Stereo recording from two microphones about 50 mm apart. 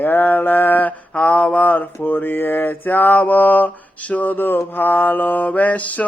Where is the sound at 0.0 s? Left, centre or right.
Left.